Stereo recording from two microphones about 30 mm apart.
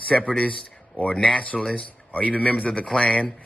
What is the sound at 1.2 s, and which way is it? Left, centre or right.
Speech, left.